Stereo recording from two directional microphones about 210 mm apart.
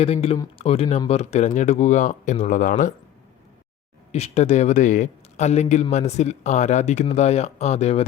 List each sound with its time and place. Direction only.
0.0 s a man's voice: 30° left (ahead or behind)
4.1 s a man's voice: 30° left (ahead or behind)